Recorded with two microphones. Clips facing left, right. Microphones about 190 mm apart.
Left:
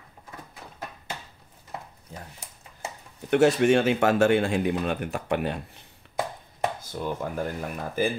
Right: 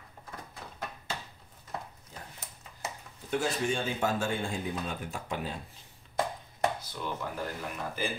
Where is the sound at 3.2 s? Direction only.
70° left (ahead or behind).